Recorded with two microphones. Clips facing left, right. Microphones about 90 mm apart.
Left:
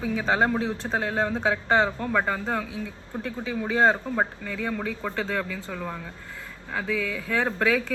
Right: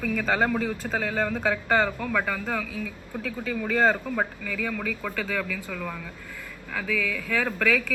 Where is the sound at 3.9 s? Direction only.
25° left (ahead or behind).